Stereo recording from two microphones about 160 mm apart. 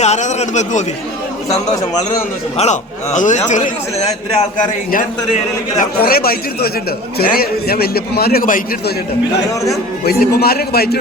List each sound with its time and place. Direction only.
0.0 s a man's voice: 45° left (ahead or behind)
2.6 s a man's voice: 45° left (ahead or behind)
5.8 s a man's voice: 70° left (ahead or behind)
10.0 s a man's voice: 70° left (ahead or behind)